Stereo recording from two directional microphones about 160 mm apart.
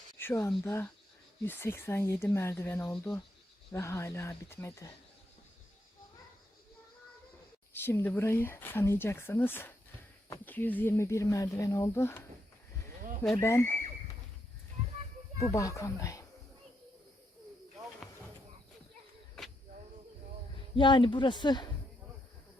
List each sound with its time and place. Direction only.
0.2 s speech: 15° left (ahead or behind)
7.7 s speech: 15° left (ahead or behind)
13.4 s speech: 15° left (ahead or behind)
15.4 s speech: 20° left (ahead or behind)
20.7 s speech: 30° left (ahead or behind)